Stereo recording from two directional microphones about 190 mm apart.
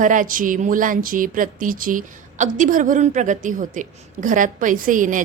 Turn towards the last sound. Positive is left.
turn(degrees=-45)  # may be behind; listen again after turning